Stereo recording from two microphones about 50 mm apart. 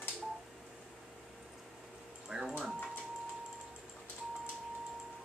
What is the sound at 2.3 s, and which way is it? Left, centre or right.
Speech, right.